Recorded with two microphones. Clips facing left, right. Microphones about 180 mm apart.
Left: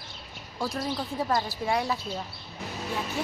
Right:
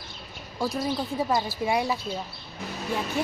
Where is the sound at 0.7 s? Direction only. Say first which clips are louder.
Right 3 dB; 5° right (ahead or behind).